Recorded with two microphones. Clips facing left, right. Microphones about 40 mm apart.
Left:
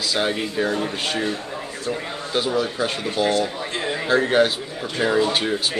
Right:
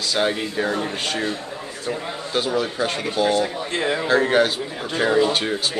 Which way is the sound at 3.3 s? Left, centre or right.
Centre.